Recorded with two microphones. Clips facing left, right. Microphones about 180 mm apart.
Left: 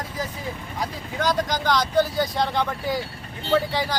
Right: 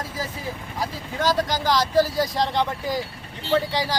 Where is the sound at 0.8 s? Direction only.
Centre (ahead or behind).